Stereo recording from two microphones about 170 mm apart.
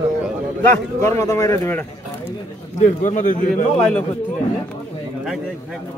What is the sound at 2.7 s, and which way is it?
Speech, 45° left (ahead or behind).